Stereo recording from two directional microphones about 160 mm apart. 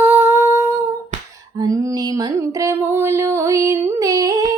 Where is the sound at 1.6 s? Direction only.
20° right (ahead or behind).